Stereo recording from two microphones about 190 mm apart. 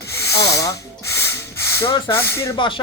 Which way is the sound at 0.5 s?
15° left (ahead or behind).